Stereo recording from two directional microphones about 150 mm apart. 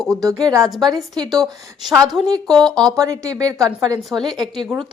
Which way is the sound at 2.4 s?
5° left (ahead or behind).